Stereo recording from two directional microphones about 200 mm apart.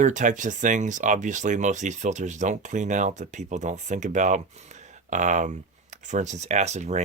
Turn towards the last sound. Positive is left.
turn(degrees=-35)  # may be behind; listen again after turning